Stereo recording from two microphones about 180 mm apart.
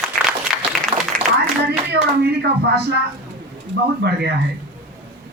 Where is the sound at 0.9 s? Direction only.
30° right (ahead or behind).